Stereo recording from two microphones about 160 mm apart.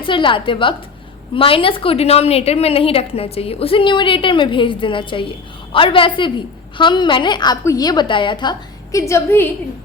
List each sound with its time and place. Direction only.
0.0 s a woman's voice: 30° left (ahead or behind); by 9.5 s 15° left (ahead or behind)